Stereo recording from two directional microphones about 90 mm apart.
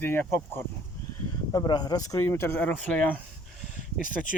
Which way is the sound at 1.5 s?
50° left (ahead or behind).